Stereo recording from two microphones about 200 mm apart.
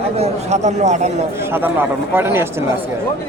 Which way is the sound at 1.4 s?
10° right (ahead or behind).